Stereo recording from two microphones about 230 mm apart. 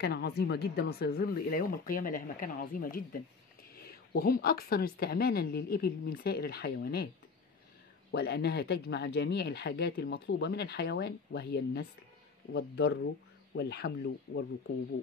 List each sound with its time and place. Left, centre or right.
0.0 s speech: left
8.1 s speech: left